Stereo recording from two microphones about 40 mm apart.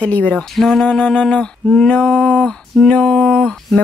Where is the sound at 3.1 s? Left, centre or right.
Left.